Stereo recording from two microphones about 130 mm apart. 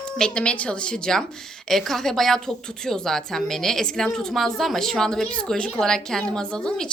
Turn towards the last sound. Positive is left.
turn(degrees=5)  # may be behind; listen again after turning